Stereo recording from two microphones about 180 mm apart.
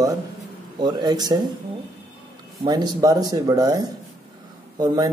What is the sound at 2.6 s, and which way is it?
Speech, 25° right (ahead or behind).